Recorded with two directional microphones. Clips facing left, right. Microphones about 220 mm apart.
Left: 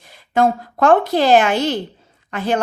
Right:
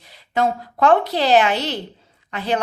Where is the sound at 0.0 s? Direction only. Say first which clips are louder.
Left 4 dB; 50° left (ahead or behind).